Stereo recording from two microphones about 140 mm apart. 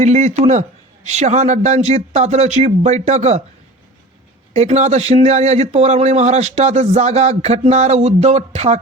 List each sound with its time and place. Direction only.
0.0 s speech: 55° right (ahead or behind)
4.5 s speech: 55° right (ahead or behind)